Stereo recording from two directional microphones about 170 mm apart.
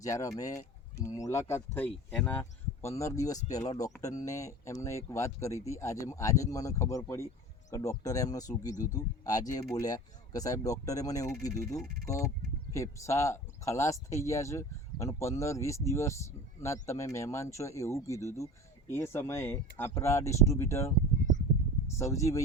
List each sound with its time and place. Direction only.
0.0 s speech: 20° left (ahead or behind)
21.9 s speech: 15° left (ahead or behind)